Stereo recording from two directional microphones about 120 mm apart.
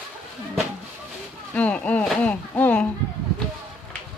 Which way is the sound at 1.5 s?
10° left (ahead or behind).